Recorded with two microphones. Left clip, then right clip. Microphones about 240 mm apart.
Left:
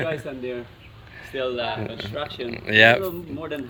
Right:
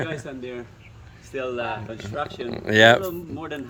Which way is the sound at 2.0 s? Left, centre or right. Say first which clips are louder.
Even; centre.